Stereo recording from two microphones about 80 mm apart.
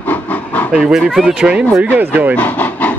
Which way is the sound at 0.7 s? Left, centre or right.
Centre.